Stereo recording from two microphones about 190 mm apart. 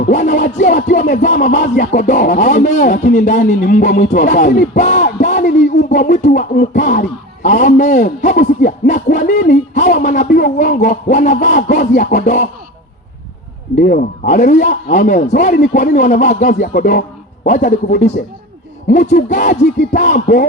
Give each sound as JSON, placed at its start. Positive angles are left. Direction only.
{"t": 0.0, "sound": "a man's voice", "side_deg": 40}
{"t": 5.2, "sound": "a sound", "side_deg": 40}
{"t": 7.4, "sound": "a man's voice", "side_deg": 40}
{"t": 13.7, "sound": "a man's voice", "side_deg": 45}